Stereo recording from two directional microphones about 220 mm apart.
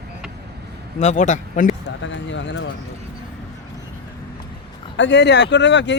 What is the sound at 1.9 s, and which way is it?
Speech, 55° left (ahead or behind).